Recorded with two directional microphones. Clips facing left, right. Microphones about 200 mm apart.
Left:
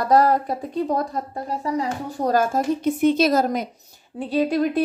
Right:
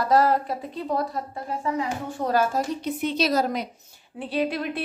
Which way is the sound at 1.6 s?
35° left (ahead or behind).